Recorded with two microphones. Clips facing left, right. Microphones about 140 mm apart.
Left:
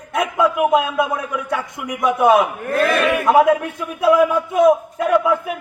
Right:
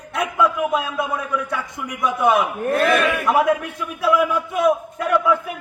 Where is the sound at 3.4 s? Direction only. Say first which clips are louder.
Left 3 dB; 20° left (ahead or behind).